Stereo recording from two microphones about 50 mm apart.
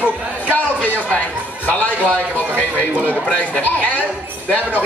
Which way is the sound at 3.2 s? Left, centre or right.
Centre.